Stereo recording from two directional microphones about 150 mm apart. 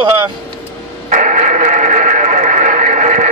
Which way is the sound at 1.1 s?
55° right (ahead or behind).